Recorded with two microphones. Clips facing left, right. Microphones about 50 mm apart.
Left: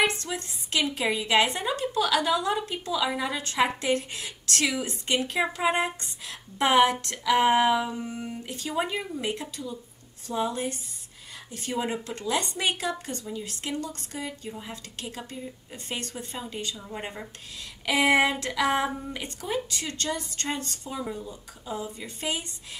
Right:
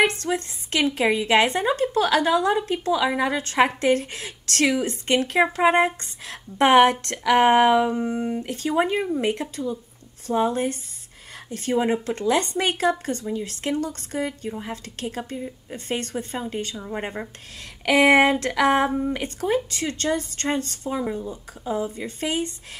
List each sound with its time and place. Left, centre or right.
0.2 s a woman's voice: right
17.8 s a woman's voice: right
20.9 s a woman's voice: right